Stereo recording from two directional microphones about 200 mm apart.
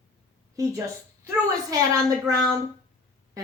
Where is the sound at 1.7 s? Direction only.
20° right (ahead or behind).